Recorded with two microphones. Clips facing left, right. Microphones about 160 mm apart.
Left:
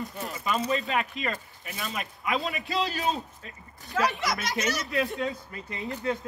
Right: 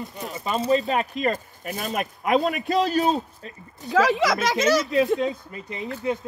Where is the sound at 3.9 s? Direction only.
90° right.